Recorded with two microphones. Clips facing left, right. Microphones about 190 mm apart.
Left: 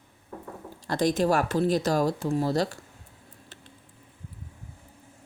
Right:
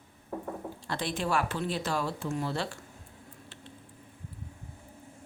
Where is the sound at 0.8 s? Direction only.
40° left (ahead or behind).